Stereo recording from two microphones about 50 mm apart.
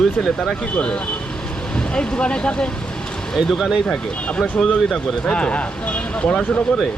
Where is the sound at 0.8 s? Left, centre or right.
Left.